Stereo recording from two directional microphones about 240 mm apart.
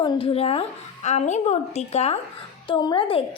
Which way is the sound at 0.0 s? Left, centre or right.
Left.